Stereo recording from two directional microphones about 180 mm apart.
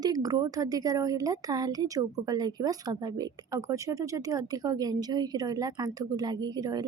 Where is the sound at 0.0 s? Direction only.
20° right (ahead or behind).